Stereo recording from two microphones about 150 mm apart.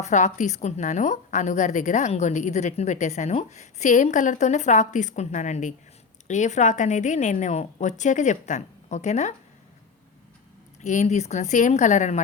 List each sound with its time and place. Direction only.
0.0 s a woman's voice: 50° left (ahead or behind)
10.8 s a woman's voice: 50° left (ahead or behind)